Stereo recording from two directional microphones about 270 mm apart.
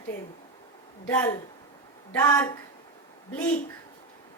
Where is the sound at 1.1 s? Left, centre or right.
Centre.